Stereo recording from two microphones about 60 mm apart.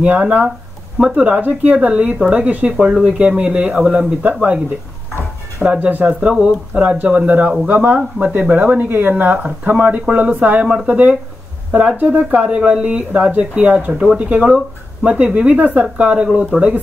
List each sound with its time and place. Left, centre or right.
0.0 s speech: right
0.9 s speech: centre
2.9 s speech: centre; by 4.6 s right
5.7 s speech: right